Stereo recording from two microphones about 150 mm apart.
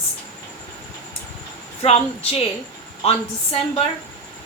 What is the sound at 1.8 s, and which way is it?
A woman's voice, 40° left (ahead or behind).